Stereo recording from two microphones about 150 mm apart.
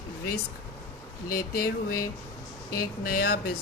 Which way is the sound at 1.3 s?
80° left.